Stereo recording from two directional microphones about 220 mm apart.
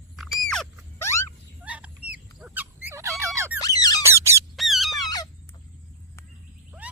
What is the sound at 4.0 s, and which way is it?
Squeak, 10° right (ahead or behind).